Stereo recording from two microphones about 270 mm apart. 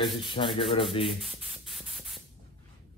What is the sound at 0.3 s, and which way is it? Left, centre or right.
Rub, centre.